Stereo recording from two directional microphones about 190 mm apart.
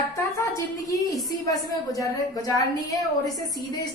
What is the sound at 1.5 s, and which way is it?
A woman's voice, 20° left (ahead or behind).